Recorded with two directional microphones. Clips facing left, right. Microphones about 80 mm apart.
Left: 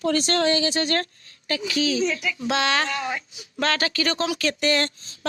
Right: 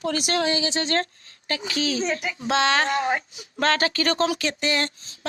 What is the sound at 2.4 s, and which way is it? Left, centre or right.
Speech, right.